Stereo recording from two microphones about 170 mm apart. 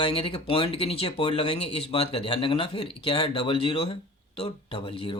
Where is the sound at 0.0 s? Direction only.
30° left (ahead or behind).